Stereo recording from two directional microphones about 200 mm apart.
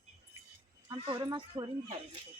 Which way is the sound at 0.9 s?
20° right (ahead or behind).